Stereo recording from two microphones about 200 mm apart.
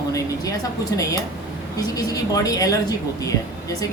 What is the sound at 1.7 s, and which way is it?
Speech, 20° left (ahead or behind).